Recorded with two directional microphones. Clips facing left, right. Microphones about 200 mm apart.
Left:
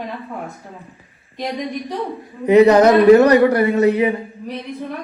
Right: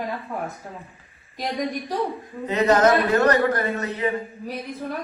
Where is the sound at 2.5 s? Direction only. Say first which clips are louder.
Left 8 dB; 15° left (ahead or behind).